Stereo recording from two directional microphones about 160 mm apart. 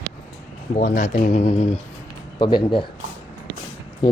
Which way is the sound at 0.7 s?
50° left (ahead or behind).